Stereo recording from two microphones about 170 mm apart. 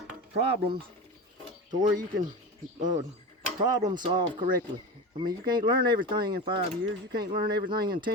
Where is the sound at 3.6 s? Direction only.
25° right (ahead or behind).